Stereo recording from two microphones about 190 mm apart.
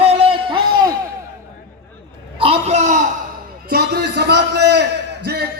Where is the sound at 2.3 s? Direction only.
30° right (ahead or behind).